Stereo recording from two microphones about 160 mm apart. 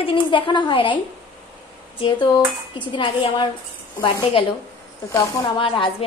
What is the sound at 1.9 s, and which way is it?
A woman's voice, 30° left (ahead or behind).